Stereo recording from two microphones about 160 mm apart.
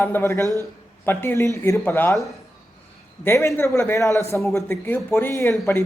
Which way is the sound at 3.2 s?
15° left (ahead or behind).